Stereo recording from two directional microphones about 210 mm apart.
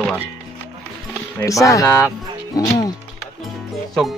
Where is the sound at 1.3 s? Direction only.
15° left (ahead or behind).